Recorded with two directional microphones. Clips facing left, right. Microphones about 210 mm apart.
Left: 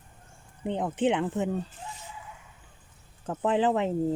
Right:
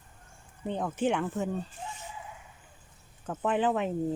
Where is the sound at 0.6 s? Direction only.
20° left (ahead or behind).